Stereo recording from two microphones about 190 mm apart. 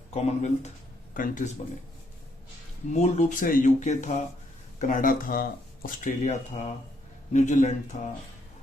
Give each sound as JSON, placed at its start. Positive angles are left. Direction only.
{"t": 0.1, "sound": "speech", "side_deg": 35}
{"t": 2.9, "sound": "speech", "side_deg": 35}